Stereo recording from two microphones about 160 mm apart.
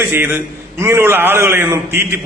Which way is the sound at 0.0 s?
15° right (ahead or behind).